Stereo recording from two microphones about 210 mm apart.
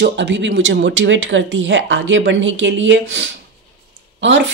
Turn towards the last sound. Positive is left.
turn(degrees=-60)  # may be behind; listen again after turning